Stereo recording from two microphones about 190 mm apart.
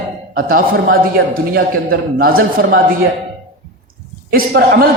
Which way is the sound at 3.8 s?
50° right (ahead or behind).